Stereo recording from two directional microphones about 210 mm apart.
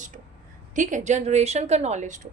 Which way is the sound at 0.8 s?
35° right (ahead or behind).